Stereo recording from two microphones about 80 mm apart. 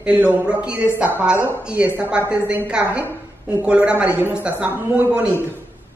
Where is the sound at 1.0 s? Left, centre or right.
Right.